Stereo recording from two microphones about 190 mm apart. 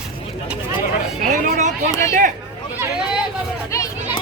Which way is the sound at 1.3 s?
40° right (ahead or behind).